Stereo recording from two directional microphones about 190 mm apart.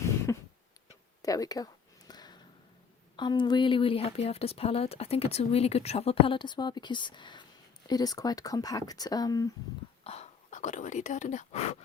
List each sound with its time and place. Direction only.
0.3 s a sound: 15° left (ahead or behind)
3.2 s speech: 25° left (ahead or behind)
10.0 s speech: 35° left (ahead or behind)